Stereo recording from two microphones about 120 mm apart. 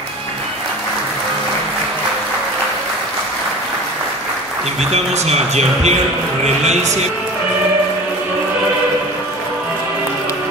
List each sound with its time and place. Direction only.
4.9 s a man's voice: 65° right (ahead or behind)